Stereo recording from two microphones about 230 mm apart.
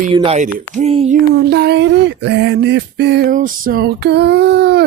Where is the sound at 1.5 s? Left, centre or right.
Right.